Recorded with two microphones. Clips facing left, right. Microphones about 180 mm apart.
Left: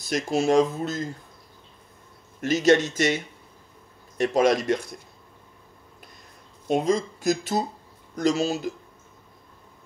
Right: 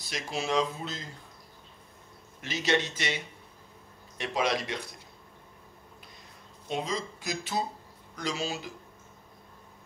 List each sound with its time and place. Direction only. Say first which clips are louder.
0.0 s speech: left 11 dB; 45° left (ahead or behind)
2.4 s speech: left 10 dB; 45° left (ahead or behind)
4.2 s speech: left 9 dB; 45° left (ahead or behind)
6.7 s speech: left 10 dB; 50° left (ahead or behind)